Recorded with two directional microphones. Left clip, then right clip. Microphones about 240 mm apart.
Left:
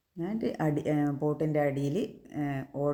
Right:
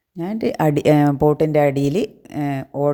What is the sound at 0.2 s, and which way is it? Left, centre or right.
Speech, right.